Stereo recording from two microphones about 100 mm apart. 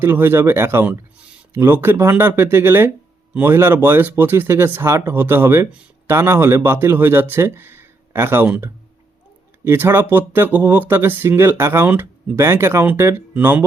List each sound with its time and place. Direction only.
0.0 s speech: 20° right (ahead or behind)
9.6 s speech: 20° right (ahead or behind)